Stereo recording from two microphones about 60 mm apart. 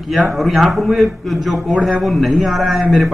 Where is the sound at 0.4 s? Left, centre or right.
Centre.